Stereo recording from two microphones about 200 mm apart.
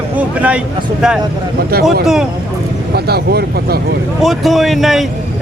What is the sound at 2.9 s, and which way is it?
Speech, 55° right (ahead or behind).